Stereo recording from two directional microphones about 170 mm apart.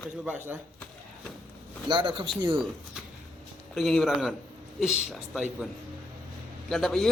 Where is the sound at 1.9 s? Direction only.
30° right (ahead or behind).